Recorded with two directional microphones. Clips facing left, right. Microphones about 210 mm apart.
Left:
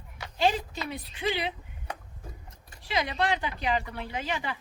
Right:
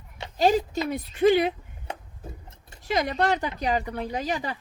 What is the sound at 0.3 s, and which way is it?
A woman's voice, 40° right (ahead or behind).